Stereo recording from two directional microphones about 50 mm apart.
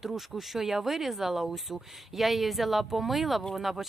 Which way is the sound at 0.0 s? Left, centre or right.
Centre.